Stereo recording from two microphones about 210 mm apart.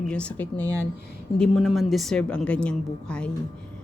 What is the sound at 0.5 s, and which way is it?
Speech, 15° right (ahead or behind).